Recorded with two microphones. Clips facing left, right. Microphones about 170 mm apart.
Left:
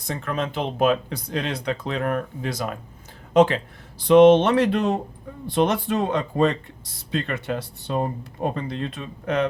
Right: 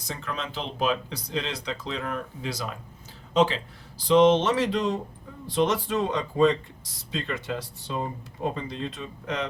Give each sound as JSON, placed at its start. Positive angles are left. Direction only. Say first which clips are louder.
{"t": 0.0, "sound": "speech", "louder": "left 7 dB", "side_deg": 55}